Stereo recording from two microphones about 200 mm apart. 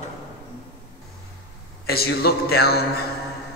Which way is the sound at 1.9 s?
50° left (ahead or behind).